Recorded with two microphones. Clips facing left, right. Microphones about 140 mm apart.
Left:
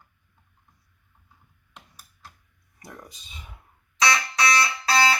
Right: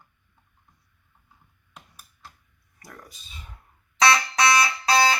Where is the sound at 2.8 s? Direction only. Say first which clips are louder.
Left 2 dB; 20° left (ahead or behind).